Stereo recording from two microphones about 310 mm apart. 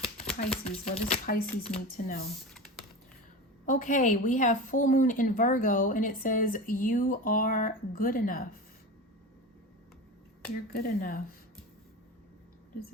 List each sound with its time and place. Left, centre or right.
0.6 s a woman's voice: centre
2.5 s computer keyboard: centre
3.7 s a woman's voice: left
10.7 s a woman's voice: left